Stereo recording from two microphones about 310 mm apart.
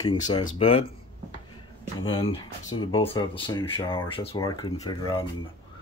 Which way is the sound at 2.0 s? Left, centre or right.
Centre.